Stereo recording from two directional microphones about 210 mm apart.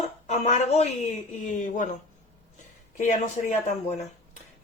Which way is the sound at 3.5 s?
35° left (ahead or behind).